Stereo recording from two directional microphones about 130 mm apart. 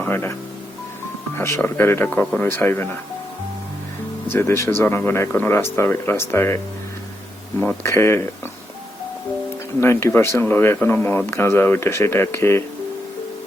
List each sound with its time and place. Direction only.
0.0 s speech: 15° left (ahead or behind)
1.4 s speech: 20° left (ahead or behind)
4.3 s speech: 20° left (ahead or behind)
7.6 s speech: 15° left (ahead or behind)
9.8 s speech: 20° left (ahead or behind)